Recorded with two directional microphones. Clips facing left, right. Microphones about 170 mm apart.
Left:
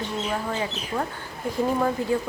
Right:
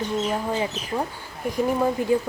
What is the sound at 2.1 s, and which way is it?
Speech, 15° right (ahead or behind).